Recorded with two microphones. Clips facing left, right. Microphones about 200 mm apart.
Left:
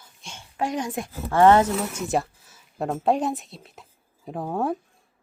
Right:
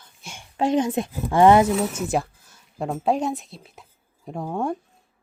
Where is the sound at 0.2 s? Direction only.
10° right (ahead or behind).